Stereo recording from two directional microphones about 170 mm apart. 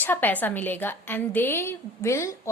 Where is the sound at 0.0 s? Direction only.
10° left (ahead or behind).